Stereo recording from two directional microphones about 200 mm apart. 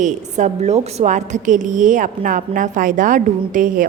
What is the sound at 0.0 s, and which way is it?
A woman's voice, 35° right (ahead or behind).